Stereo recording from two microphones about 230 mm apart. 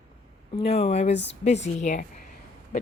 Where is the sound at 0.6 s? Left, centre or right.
Left.